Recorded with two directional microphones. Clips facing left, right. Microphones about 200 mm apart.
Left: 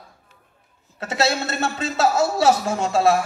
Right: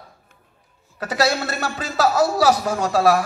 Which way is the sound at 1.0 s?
25° left (ahead or behind).